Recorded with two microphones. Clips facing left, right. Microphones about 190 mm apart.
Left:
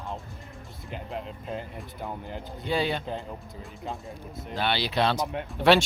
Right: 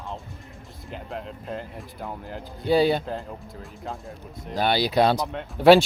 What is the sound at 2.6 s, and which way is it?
Speech, 35° right (ahead or behind).